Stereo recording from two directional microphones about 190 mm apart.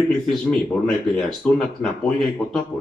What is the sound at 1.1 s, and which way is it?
Speech, centre (ahead or behind).